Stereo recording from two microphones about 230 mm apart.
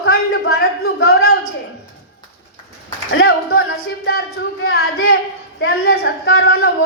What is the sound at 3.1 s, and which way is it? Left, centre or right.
Speech, left.